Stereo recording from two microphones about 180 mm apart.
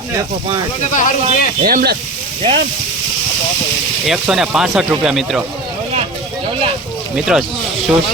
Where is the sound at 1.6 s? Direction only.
55° right (ahead or behind).